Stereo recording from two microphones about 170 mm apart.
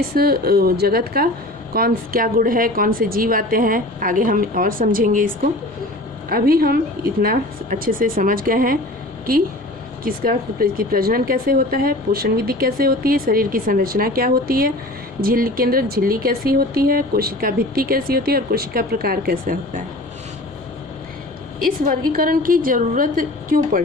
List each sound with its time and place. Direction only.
0.1 s speech: 65° right (ahead or behind)
10.0 s speech: 60° right (ahead or behind)
21.6 s speech: 55° right (ahead or behind)